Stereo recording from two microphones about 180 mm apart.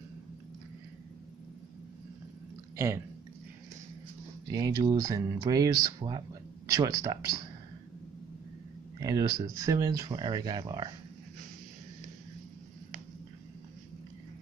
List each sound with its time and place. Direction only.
2.7 s speech: 15° right (ahead or behind)
4.5 s speech: 20° right (ahead or behind)
9.0 s speech: 20° right (ahead or behind)